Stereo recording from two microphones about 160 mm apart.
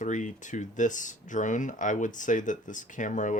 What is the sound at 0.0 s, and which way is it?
Speech, 50° left (ahead or behind).